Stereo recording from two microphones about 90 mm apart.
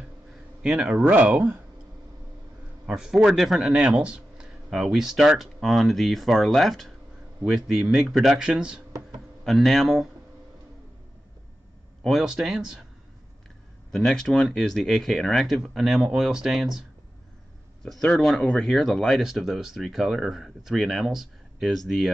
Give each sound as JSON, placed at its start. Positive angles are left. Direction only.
{"t": 0.6, "sound": "speech", "side_deg": -5}
{"t": 1.0, "sound": "speech", "side_deg": -15}
{"t": 2.9, "sound": "speech", "side_deg": -5}
{"t": 12.0, "sound": "speech", "side_deg": 0}
{"t": 13.9, "sound": "speech", "side_deg": 5}
{"t": 17.8, "sound": "speech", "side_deg": 0}